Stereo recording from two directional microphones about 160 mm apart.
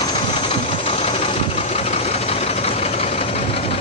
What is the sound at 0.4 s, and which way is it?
Vehicle, 45° left (ahead or behind).